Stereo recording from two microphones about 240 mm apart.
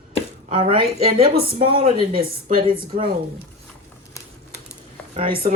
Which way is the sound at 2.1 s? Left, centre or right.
Right.